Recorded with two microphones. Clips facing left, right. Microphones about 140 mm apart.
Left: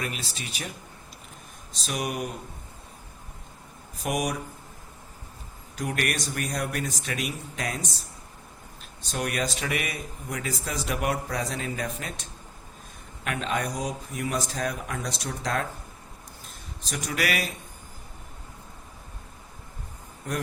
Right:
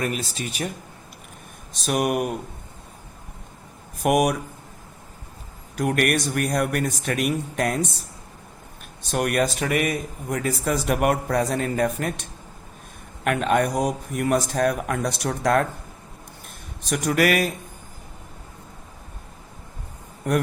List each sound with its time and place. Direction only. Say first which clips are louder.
0.0 s speech: right 7 dB; 45° right (ahead or behind)
1.8 s speech: right 8 dB; 55° right (ahead or behind)
4.0 s speech: right 9 dB; 60° right (ahead or behind)
5.7 s speech: right 8 dB; 55° right (ahead or behind)
9.0 s speech: right 7 dB; 55° right (ahead or behind)
16.9 s speech: right 9 dB; 50° right (ahead or behind)
20.3 s speech: right 9 dB; 65° right (ahead or behind)